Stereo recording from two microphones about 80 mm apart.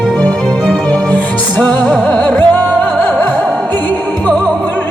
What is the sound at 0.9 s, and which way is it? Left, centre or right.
Music, centre.